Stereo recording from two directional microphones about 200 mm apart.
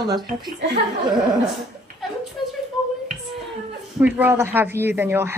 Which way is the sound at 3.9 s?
10° right (ahead or behind).